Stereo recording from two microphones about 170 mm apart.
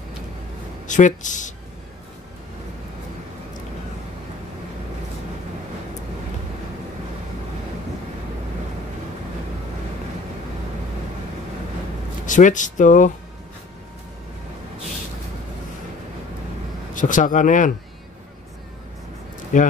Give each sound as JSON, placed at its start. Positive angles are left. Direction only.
{"t": 0.8, "sound": "speech", "side_deg": 45}
{"t": 12.3, "sound": "speech", "side_deg": 50}
{"t": 16.9, "sound": "speech", "side_deg": 50}
{"t": 19.5, "sound": "speech", "side_deg": 50}